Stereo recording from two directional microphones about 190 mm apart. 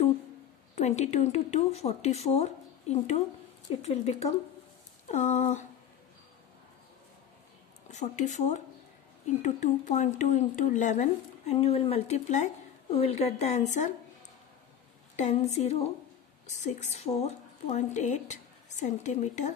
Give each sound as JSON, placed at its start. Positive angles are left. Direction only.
{"t": 0.7, "sound": "speech", "side_deg": 35}
{"t": 7.9, "sound": "speech", "side_deg": 40}
{"t": 15.1, "sound": "a woman's voice", "side_deg": 35}